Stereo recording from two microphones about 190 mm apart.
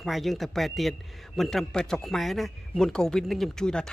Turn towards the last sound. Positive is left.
turn(degrees=5)  # may be behind; listen again after turning